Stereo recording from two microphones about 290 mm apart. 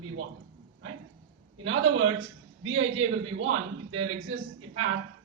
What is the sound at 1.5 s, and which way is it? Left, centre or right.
A man's voice, right.